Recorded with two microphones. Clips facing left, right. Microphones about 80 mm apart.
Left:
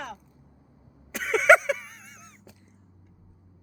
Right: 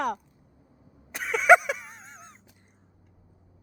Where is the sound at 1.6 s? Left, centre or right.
Centre; by 2.6 s right.